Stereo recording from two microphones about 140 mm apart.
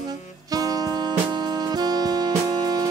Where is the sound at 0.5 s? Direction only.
25° right (ahead or behind).